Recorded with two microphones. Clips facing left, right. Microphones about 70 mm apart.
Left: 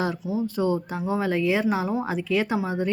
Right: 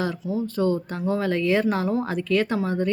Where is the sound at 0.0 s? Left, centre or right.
Centre.